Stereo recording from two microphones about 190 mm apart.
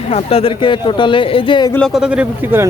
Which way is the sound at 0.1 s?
35° left (ahead or behind).